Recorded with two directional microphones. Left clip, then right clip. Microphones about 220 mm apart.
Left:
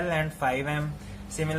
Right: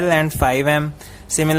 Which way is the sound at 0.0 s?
50° right (ahead or behind).